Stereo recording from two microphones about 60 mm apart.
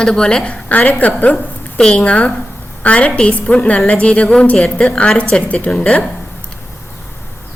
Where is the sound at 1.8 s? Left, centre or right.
Centre.